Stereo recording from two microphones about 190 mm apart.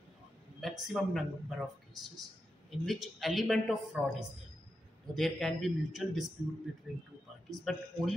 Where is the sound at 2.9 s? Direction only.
Centre (ahead or behind).